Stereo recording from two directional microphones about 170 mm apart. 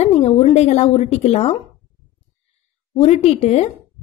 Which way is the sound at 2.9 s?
40° left (ahead or behind).